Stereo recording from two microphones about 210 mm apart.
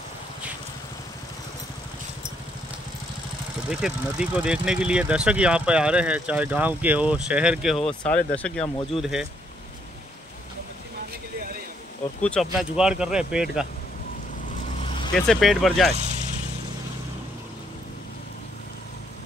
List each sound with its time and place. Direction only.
3.8 s speech: 5° right (ahead or behind)
12.2 s speech: 5° left (ahead or behind)
14.6 s vehicle: 30° left (ahead or behind)
15.1 s speech: centre (ahead or behind)
16.0 s vehicle: 35° right (ahead or behind)